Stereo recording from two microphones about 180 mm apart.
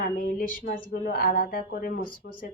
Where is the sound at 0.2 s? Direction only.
55° left (ahead or behind).